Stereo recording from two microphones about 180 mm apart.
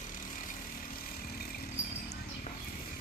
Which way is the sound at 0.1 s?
50° left (ahead or behind).